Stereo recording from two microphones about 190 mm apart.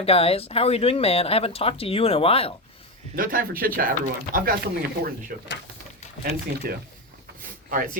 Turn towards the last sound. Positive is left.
turn(degrees=-45)  # may be behind; listen again after turning